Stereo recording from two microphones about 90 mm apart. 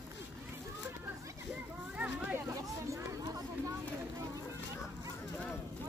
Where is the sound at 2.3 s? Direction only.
30° right (ahead or behind).